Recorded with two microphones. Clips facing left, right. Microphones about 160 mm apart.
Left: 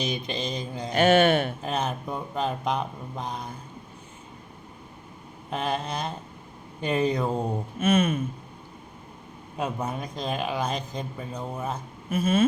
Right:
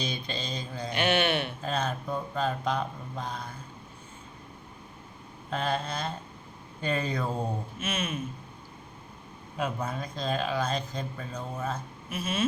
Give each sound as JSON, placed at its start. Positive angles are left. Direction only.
{"t": 0.0, "sound": "speech", "side_deg": 15}
{"t": 0.9, "sound": "speech", "side_deg": 45}
{"t": 1.6, "sound": "speech", "side_deg": 20}
{"t": 5.5, "sound": "speech", "side_deg": 15}
{"t": 7.8, "sound": "speech", "side_deg": 50}
{"t": 9.6, "sound": "speech", "side_deg": 15}
{"t": 12.1, "sound": "speech", "side_deg": 50}